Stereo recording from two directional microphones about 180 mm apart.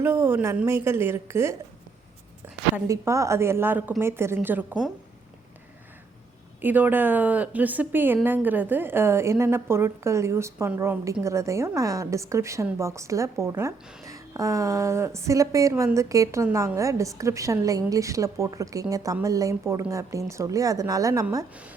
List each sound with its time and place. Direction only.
0.0 s a woman's voice: 15° right (ahead or behind)
2.7 s a woman's voice: 15° right (ahead or behind)
6.6 s a woman's voice: 10° right (ahead or behind)